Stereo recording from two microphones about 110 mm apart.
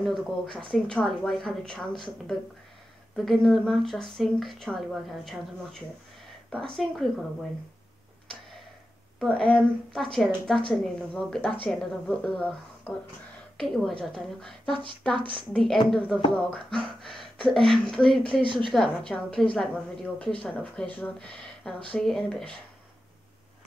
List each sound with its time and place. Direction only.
0.0 s speech: centre (ahead or behind)
9.2 s speech: 5° left (ahead or behind)
13.6 s speech: 5° left (ahead or behind)
14.7 s speech: 50° right (ahead or behind)
15.5 s a woman's voice: 5° left (ahead or behind)
18.4 s speech: 50° right (ahead or behind)
18.7 s speech: 5° left (ahead or behind)